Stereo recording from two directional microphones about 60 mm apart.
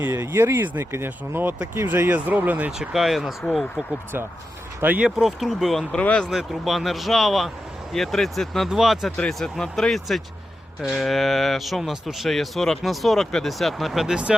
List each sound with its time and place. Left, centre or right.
0.0 s speech: right
2.0 s speech: right
2.7 s speech: centre
5.0 s speech: centre
5.9 s speech: centre
6.3 s speech: centre
8.7 s speech: centre
9.4 s speech: centre